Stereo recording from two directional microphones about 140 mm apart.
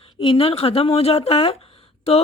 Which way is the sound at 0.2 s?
40° left (ahead or behind).